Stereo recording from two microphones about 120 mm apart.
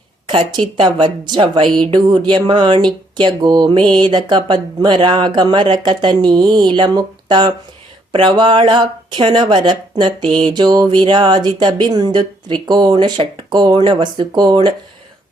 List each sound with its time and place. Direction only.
0.3 s a woman's voice: 45° right (ahead or behind)